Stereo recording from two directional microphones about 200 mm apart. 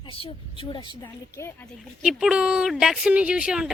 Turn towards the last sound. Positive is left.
turn(degrees=-5)  # may be behind; listen again after turning